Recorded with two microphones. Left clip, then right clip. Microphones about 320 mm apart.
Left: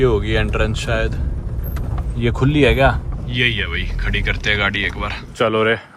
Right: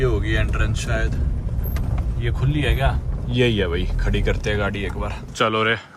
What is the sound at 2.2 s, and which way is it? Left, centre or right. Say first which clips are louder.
Speech: left 10 dB; centre.